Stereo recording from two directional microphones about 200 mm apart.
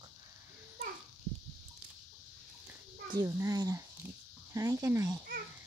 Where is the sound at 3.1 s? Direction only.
15° right (ahead or behind).